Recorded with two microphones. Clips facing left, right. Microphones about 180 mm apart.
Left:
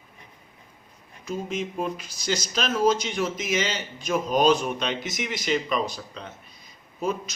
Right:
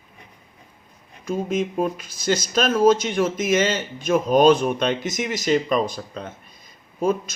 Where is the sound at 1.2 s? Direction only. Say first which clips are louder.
Right 6 dB; 50° right (ahead or behind).